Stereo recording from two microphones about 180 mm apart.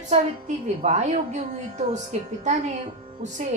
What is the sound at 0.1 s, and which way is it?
Speech, 40° right (ahead or behind).